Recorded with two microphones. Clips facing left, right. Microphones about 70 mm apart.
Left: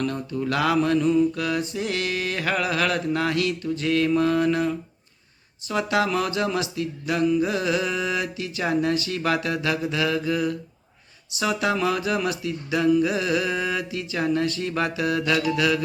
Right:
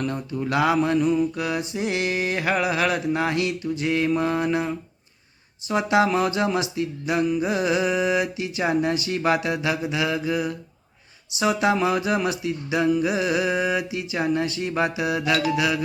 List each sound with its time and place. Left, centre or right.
0.0 s mantra: centre
15.5 s music: centre